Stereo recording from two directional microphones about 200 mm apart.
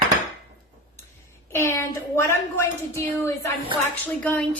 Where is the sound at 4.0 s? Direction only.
10° left (ahead or behind).